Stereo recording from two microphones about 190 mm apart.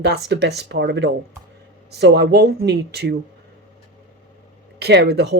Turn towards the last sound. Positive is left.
turn(degrees=-60)  # may be behind; listen again after turning